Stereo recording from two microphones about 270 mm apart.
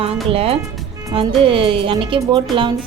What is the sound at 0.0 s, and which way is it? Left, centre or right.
A woman's voice, right.